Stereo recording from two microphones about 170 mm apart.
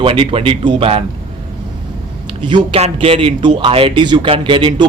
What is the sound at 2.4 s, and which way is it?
Speech, 30° right (ahead or behind).